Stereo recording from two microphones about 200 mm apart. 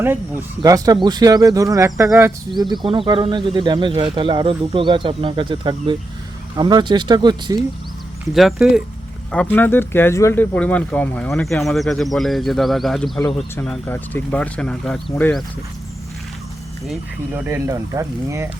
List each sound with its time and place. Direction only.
0.0 s speech: 10° right (ahead or behind)
8.3 s speech: centre (ahead or behind)
16.8 s speech: 5° right (ahead or behind)